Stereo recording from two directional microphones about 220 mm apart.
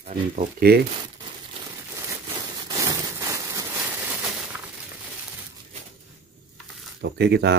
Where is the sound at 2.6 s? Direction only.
15° right (ahead or behind).